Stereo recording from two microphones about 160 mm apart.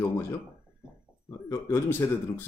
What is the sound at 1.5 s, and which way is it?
Speech, 15° left (ahead or behind).